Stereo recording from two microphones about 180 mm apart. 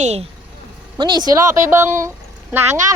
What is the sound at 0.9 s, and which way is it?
Speech, 25° right (ahead or behind).